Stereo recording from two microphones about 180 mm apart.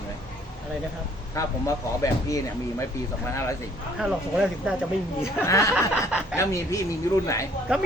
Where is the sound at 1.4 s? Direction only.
20° left (ahead or behind).